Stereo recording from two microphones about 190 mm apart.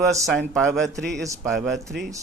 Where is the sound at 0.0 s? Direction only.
15° right (ahead or behind).